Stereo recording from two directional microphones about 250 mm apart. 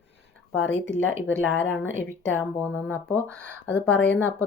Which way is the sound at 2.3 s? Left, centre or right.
Centre.